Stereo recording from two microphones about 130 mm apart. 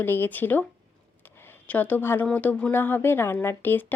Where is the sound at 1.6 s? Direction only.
10° left (ahead or behind).